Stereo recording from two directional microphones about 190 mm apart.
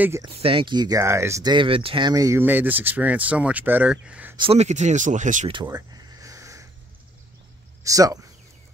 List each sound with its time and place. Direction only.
0.2 s speech: 30° right (ahead or behind); by 4.4 s 5° right (ahead or behind)
4.4 s speech: 35° right (ahead or behind)
5.5 s speech: 25° right (ahead or behind)
5.8 s a sound: 15° right (ahead or behind)
7.8 s speech: 20° right (ahead or behind)